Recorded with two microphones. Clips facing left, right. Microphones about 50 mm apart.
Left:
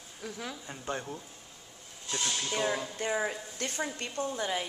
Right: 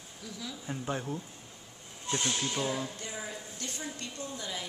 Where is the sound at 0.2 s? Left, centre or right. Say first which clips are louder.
Left 3 dB; left.